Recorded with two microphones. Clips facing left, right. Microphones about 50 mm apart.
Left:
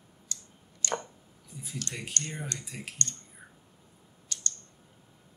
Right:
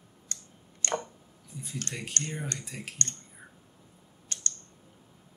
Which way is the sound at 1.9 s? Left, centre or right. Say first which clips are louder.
Even; right.